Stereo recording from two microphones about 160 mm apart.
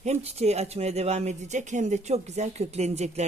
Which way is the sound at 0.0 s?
45° right (ahead or behind).